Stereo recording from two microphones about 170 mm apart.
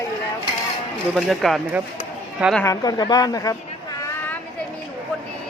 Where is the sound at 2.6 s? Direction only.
20° left (ahead or behind).